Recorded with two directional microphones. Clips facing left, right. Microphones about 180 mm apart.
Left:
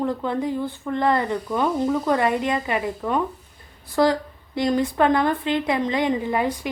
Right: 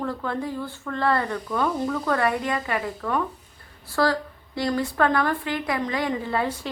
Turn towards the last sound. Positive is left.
turn(degrees=15)  # may be behind; listen again after turning